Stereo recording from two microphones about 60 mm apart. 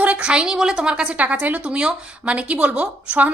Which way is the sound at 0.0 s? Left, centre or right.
Right.